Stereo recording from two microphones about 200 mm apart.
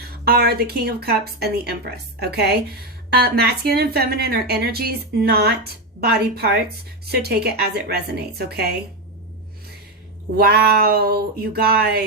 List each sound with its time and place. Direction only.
0.0 s speech: 50° right (ahead or behind)
10.3 s speech: 50° right (ahead or behind)